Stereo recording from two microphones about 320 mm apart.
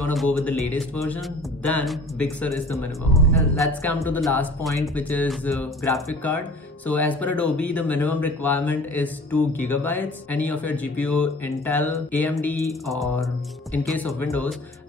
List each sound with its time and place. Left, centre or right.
0.1 s speech: centre
13.8 s speech: centre